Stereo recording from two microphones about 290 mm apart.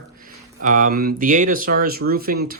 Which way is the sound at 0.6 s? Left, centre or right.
Right.